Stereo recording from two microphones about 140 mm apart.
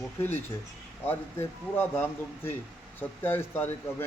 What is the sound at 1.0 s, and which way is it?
Speech, 15° left (ahead or behind).